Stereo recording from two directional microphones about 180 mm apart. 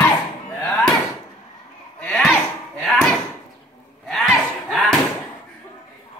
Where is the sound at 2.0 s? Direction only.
5° left (ahead or behind).